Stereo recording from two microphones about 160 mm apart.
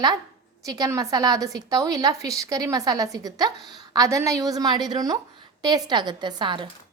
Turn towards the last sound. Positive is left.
turn(degrees=-30)  # may be behind; listen again after turning